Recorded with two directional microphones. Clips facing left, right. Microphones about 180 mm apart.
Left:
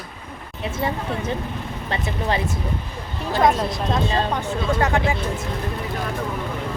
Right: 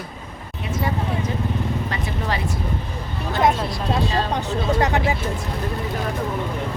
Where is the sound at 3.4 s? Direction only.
Centre (ahead or behind).